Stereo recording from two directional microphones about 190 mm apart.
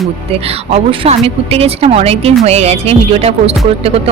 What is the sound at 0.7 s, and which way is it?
Speech, 30° right (ahead or behind).